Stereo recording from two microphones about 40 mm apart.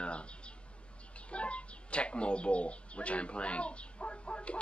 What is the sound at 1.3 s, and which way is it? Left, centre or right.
Speech, left.